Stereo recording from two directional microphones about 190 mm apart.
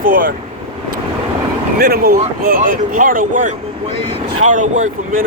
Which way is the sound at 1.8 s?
50° right (ahead or behind).